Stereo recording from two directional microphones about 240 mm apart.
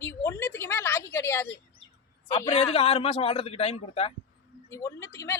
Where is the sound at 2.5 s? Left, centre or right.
Left.